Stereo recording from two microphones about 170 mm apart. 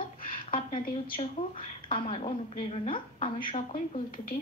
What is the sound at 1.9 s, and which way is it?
A child's voice, 30° left (ahead or behind).